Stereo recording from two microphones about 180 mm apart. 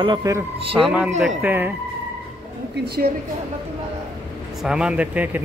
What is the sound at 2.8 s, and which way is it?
Speech, 60° right (ahead or behind).